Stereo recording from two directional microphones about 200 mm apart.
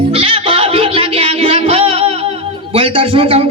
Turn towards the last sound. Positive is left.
turn(degrees=-25)  # may be behind; listen again after turning